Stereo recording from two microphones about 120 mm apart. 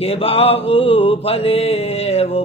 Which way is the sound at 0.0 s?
55° left (ahead or behind).